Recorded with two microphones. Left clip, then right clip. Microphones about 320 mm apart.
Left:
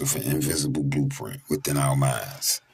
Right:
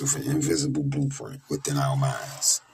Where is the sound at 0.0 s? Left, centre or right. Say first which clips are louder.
Even; left.